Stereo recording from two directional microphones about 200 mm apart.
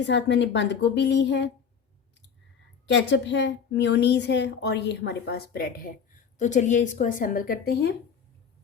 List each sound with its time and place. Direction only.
0.0 s a woman's voice: 60° left (ahead or behind)
2.8 s a woman's voice: 60° left (ahead or behind)
6.4 s a woman's voice: 40° left (ahead or behind)